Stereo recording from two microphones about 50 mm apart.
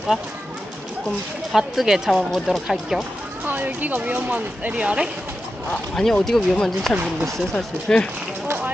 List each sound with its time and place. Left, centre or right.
1.5 s speech: centre
3.4 s speech: right
4.8 s speech: centre
5.9 s speech: centre
7.9 s speech: centre
8.4 s a sound: right